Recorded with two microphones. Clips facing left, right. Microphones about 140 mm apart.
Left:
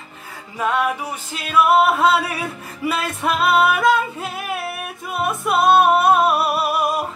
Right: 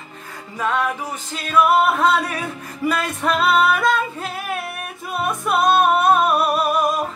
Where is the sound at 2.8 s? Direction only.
5° left (ahead or behind).